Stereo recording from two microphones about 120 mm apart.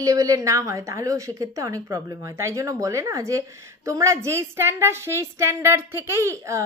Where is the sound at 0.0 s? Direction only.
30° right (ahead or behind).